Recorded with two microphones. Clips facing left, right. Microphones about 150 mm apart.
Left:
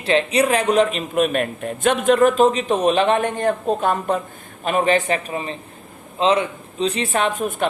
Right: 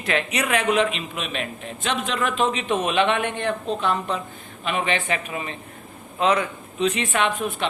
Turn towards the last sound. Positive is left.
turn(degrees=45)  # may be behind; listen again after turning